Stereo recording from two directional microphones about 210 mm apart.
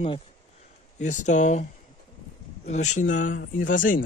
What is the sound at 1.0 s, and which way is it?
Speech, 35° left (ahead or behind).